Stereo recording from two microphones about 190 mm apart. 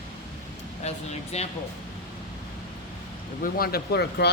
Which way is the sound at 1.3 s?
35° left (ahead or behind).